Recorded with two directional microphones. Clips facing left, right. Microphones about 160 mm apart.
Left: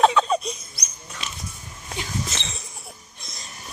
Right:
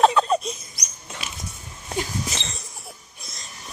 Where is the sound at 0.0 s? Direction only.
Centre (ahead or behind).